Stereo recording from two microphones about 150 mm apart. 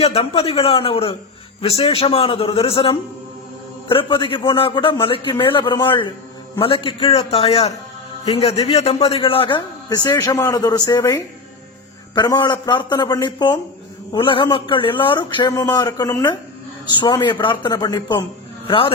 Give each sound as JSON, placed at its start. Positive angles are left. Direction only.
{"t": 0.0, "sound": "a man's voice", "side_deg": 45}